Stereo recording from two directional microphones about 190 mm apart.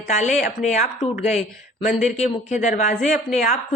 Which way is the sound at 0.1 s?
40° left (ahead or behind).